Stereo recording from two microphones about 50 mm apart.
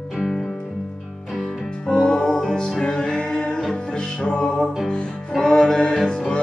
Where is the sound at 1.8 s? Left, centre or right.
Centre.